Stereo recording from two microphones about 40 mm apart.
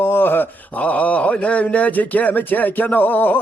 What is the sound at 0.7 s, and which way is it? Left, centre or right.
A man's voice, left.